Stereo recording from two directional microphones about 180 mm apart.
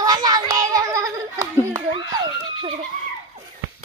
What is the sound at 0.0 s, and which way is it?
Children playing, 20° right (ahead or behind).